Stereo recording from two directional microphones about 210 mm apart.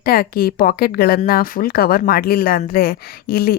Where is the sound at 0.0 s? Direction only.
45° left (ahead or behind).